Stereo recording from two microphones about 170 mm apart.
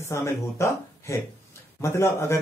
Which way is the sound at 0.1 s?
15° left (ahead or behind).